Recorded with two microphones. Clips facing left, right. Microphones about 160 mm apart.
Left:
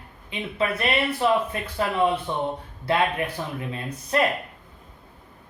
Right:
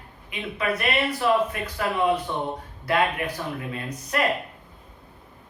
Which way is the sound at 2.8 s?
30° left (ahead or behind).